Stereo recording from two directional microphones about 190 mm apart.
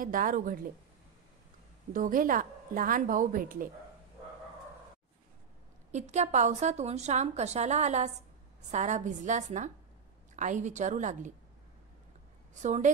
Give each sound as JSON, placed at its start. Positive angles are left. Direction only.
{"t": 0.0, "sound": "a woman's voice", "side_deg": -45}
{"t": 1.9, "sound": "a woman's voice", "side_deg": -45}
{"t": 5.9, "sound": "a woman's voice", "side_deg": -35}
{"t": 12.5, "sound": "a woman's voice", "side_deg": -40}